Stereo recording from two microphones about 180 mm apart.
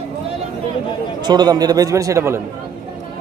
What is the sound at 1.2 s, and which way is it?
A man's voice, 25° right (ahead or behind).